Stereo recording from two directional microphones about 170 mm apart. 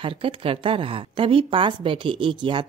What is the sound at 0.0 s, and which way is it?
Speech, 30° right (ahead or behind).